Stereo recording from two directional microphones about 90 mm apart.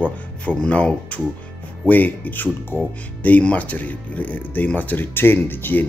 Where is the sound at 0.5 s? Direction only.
15° left (ahead or behind).